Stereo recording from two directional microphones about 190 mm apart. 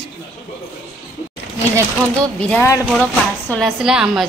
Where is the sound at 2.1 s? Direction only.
5° left (ahead or behind).